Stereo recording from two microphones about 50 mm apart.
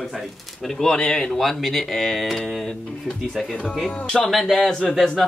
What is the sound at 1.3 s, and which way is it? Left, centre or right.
Speech, centre.